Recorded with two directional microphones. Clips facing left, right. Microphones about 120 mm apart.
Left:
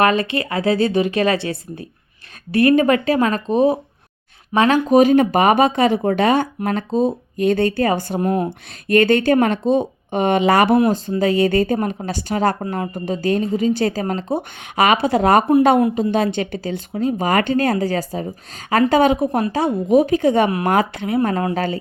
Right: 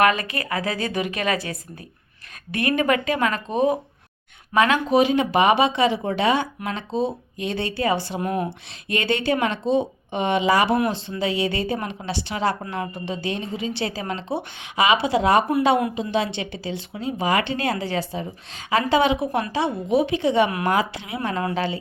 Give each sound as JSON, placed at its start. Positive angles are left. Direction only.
{"t": 0.0, "sound": "speech", "side_deg": 30}
{"t": 8.2, "sound": "speech", "side_deg": 35}
{"t": 8.4, "sound": "speech", "side_deg": 50}
{"t": 10.8, "sound": "speech", "side_deg": 45}